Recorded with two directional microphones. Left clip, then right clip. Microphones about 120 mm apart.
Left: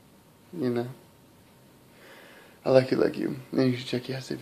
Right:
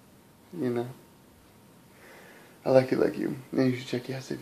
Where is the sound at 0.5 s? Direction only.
15° left (ahead or behind).